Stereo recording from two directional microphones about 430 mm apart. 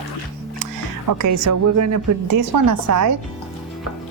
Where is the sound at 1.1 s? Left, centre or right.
Right.